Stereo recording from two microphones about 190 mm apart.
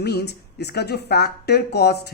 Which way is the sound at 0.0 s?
60° left (ahead or behind).